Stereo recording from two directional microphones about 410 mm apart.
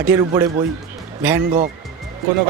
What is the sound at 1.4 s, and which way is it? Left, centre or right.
Speech, centre.